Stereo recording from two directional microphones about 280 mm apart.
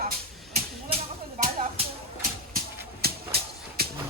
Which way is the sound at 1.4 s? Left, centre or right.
Right.